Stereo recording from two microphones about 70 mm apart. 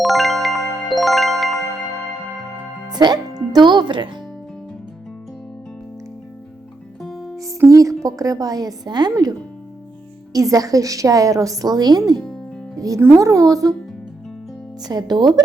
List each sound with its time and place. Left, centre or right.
0.0 s music: centre
2.9 s speech: right
7.0 s music: centre
7.7 s music: right
8.0 s a woman's voice: right
10.3 s a woman's voice: right
12.8 s a woman's voice: right
14.8 s speech: right